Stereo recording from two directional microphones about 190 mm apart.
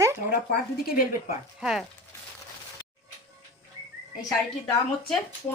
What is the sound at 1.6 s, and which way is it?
Speech, centre (ahead or behind).